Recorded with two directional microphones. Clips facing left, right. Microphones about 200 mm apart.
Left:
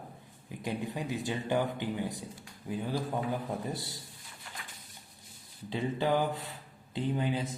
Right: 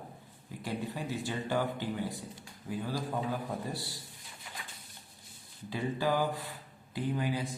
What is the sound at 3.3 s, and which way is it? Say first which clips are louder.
Speech: left 2 dB; 20° left (ahead or behind).